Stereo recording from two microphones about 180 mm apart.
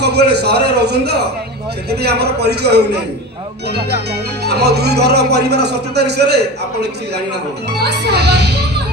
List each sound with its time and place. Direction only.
0.0 s music: 65° right (ahead or behind)
7.8 s speech: 70° right (ahead or behind)